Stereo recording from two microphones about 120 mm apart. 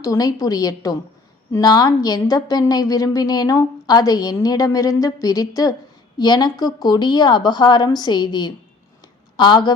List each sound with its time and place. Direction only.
0.0 s a woman's voice: 30° left (ahead or behind)